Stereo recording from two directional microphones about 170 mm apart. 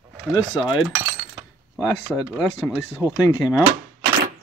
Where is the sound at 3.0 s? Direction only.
15° right (ahead or behind).